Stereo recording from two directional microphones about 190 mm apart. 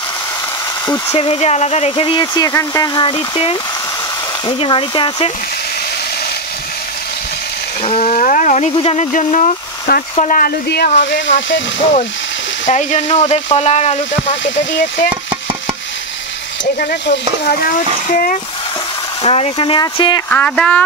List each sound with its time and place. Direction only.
0.8 s speech: 25° left (ahead or behind)
7.8 s a sound: 35° left (ahead or behind)
8.7 s speech: 35° left (ahead or behind); by 10.9 s 55° left (ahead or behind)
11.0 s speech: 70° left (ahead or behind)
12.6 s speech: 35° left (ahead or behind)
14.4 s speech: 75° left (ahead or behind)
16.8 s stir: 65° left (ahead or behind)
17.5 s speech: 45° left (ahead or behind)
19.2 s speech: 30° left (ahead or behind)
20.2 s speech: 5° left (ahead or behind)